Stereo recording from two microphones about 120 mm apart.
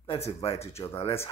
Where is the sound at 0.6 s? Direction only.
25° left (ahead or behind).